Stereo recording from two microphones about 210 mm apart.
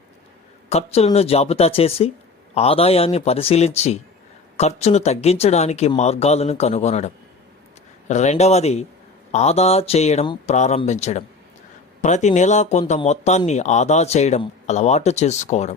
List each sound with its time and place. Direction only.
0.7 s a man's voice: 30° left (ahead or behind)